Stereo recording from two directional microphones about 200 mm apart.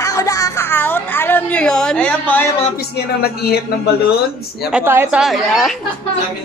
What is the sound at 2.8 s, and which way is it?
Speech, 50° left (ahead or behind).